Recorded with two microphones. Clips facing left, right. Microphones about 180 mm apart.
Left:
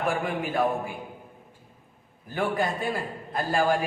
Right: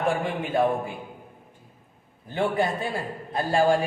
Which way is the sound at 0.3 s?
25° right (ahead or behind).